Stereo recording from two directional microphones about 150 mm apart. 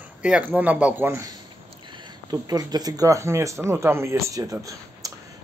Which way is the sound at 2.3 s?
25° right (ahead or behind).